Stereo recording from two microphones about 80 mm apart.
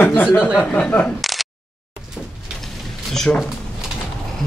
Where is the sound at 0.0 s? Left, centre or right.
Left.